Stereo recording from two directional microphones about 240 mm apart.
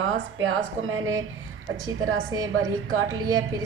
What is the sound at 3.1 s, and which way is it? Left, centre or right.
Speech, right.